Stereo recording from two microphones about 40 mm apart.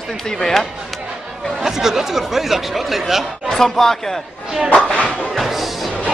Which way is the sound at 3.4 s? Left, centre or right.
Centre.